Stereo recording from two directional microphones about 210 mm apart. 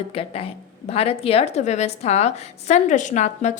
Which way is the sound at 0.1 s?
25° left (ahead or behind).